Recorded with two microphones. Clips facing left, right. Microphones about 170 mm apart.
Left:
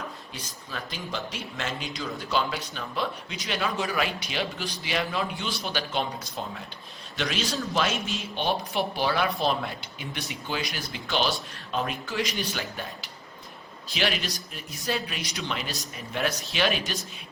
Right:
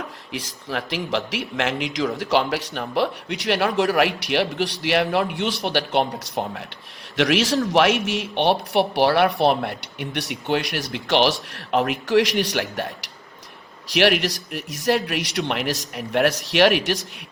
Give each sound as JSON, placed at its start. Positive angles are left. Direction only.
{"t": 0.3, "sound": "speech", "side_deg": -80}
{"t": 7.2, "sound": "a man's voice", "side_deg": -80}